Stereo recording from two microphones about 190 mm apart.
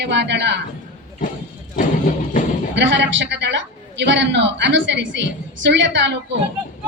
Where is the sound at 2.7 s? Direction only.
70° right (ahead or behind).